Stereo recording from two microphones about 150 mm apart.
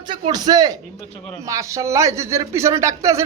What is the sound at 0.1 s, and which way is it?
A man's voice, 25° right (ahead or behind).